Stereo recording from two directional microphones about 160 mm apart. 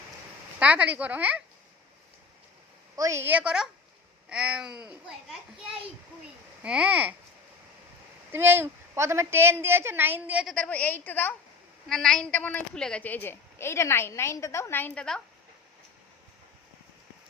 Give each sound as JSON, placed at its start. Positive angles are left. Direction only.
{"t": 0.6, "sound": "a woman's voice", "side_deg": -10}
{"t": 2.9, "sound": "a woman's voice", "side_deg": -20}
{"t": 6.6, "sound": "a woman's voice", "side_deg": -5}
{"t": 8.3, "sound": "a woman's voice", "side_deg": -15}
{"t": 10.5, "sound": "a woman's voice", "side_deg": 5}